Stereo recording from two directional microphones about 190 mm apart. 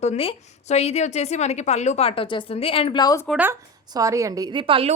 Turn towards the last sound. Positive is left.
turn(degrees=-30)  # may be behind; listen again after turning